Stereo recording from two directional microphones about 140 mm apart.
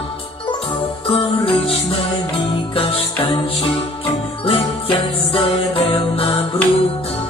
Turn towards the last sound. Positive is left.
turn(degrees=45)  # may be behind; listen again after turning